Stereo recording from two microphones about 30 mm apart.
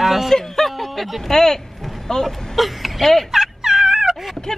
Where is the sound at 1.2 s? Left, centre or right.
Centre.